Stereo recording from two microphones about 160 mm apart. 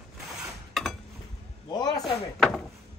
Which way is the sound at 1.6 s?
25° left (ahead or behind).